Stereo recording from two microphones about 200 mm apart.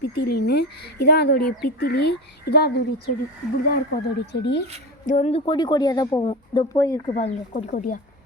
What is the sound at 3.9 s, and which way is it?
Speech, 60° left (ahead or behind).